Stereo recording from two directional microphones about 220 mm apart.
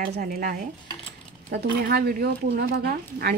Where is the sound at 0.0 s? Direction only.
40° right (ahead or behind).